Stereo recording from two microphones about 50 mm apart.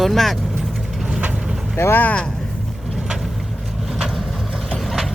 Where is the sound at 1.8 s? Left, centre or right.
Left.